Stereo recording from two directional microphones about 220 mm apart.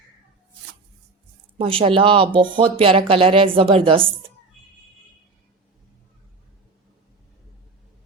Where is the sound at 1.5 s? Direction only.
25° right (ahead or behind).